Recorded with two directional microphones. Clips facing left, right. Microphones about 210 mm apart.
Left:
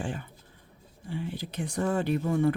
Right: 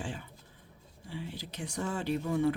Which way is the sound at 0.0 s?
55° left (ahead or behind).